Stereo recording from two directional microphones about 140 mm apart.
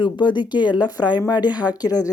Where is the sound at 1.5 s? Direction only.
10° right (ahead or behind).